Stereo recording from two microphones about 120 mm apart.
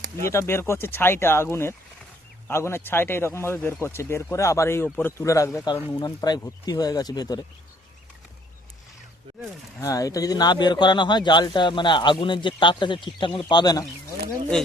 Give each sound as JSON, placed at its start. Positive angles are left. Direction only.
{"t": 0.2, "sound": "speech", "side_deg": 20}
{"t": 9.8, "sound": "speech", "side_deg": 30}